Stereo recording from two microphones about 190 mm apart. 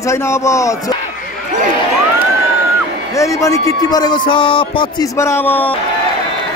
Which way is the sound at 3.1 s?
15° left (ahead or behind).